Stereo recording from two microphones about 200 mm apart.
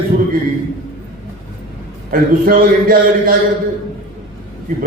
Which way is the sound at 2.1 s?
45° right (ahead or behind).